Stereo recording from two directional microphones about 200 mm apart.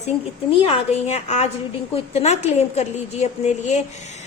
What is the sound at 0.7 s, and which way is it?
A woman's voice, 35° left (ahead or behind).